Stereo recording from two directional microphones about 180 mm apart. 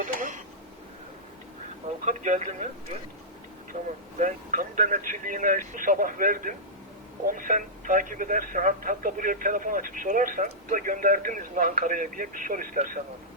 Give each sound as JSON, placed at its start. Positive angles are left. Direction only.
{"t": 0.0, "sound": "a sound", "side_deg": -45}
{"t": 2.0, "sound": "speech", "side_deg": -45}
{"t": 4.2, "sound": "speech", "side_deg": -45}